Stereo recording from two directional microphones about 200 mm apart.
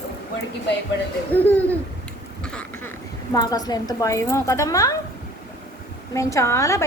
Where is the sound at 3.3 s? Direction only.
20° left (ahead or behind).